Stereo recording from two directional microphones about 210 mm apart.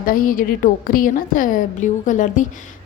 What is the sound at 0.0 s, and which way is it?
A woman's voice, 40° left (ahead or behind).